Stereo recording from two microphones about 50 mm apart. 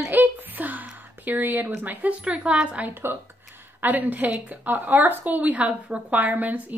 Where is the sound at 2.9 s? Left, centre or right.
Right.